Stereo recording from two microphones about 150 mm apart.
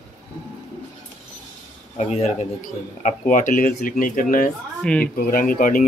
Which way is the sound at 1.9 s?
45° left (ahead or behind).